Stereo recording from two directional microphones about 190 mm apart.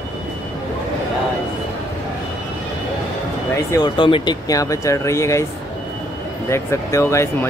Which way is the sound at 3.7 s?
25° left (ahead or behind).